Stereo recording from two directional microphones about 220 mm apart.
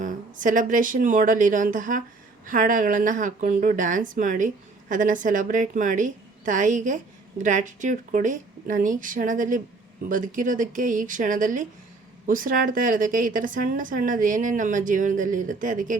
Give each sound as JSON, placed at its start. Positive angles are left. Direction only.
{"t": 0.0, "sound": "speech", "side_deg": -35}